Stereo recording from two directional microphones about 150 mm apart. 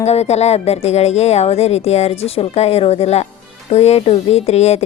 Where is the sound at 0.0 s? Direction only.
45° left (ahead or behind).